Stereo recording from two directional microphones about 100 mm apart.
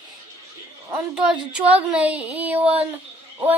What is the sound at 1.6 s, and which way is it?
Music, 15° right (ahead or behind).